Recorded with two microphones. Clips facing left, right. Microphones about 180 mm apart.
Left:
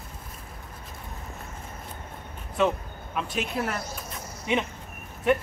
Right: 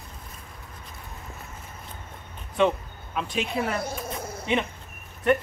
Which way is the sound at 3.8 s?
55° right (ahead or behind).